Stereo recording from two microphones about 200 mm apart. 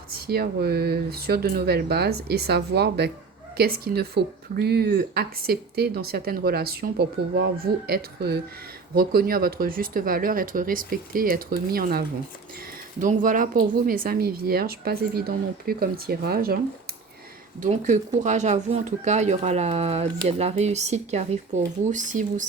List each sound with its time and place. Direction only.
0.1 s speech: 50° right (ahead or behind)
17.6 s speech: 40° right (ahead or behind)